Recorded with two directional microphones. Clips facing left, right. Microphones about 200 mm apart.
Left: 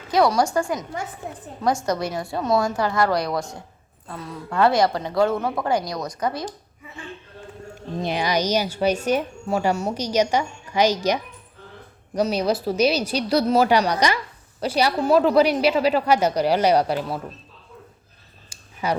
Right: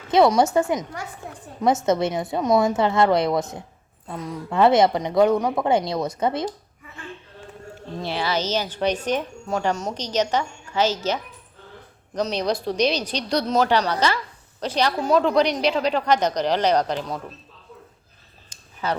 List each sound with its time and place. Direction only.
0.1 s a woman's voice: 25° right (ahead or behind)
1.2 s a woman's voice: 20° left (ahead or behind)
1.6 s a woman's voice: 25° right (ahead or behind)
7.9 s speech: 15° left (ahead or behind)
18.4 s a sound: 10° left (ahead or behind)